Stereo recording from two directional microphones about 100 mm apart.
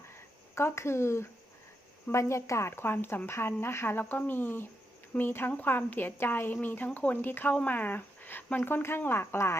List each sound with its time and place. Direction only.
0.5 s a woman's voice: 25° left (ahead or behind)